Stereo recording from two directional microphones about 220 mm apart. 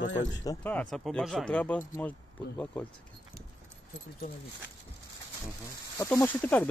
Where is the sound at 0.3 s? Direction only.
20° left (ahead or behind).